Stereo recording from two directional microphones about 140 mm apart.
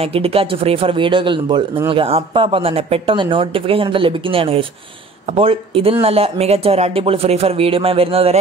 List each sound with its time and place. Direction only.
0.0 s speech: 45° right (ahead or behind)